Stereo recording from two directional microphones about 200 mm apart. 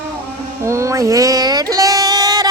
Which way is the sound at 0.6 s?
15° right (ahead or behind).